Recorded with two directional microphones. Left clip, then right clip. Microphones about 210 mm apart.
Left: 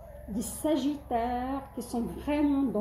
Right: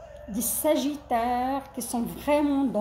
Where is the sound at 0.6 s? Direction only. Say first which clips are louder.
Right 4 dB; 30° right (ahead or behind).